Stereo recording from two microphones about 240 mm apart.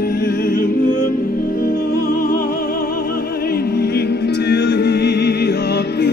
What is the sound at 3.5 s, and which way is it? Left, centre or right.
Music, left.